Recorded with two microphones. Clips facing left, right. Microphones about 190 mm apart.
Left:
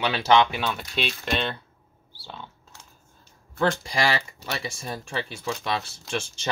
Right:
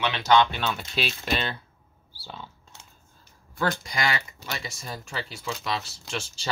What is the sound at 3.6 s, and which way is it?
Speech, 30° left (ahead or behind).